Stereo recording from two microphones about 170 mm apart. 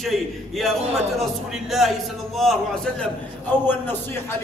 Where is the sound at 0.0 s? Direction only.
Centre (ahead or behind).